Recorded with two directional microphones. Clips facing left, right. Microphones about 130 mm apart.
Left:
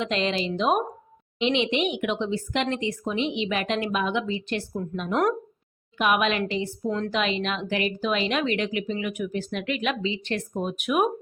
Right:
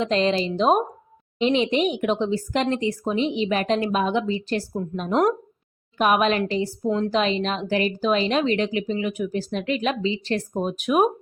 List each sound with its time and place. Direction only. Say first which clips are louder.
0.0 s a woman's voice: right 5 dB; 35° right (ahead or behind)